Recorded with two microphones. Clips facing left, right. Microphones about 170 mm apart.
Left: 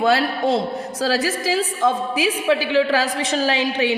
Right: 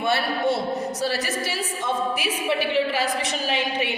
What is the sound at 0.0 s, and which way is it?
A woman's voice, 90° left.